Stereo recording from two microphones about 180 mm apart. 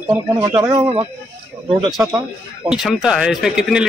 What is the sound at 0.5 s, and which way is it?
Speech, 25° right (ahead or behind).